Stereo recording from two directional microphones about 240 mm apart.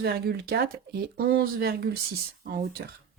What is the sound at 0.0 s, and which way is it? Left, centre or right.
Speech, right.